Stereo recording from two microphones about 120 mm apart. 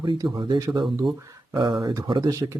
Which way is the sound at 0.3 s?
40° right (ahead or behind).